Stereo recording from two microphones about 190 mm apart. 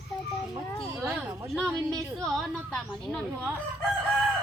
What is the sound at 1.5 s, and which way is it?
Speech, 5° left (ahead or behind).